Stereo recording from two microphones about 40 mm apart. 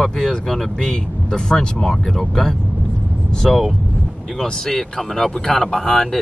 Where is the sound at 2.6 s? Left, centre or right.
Right.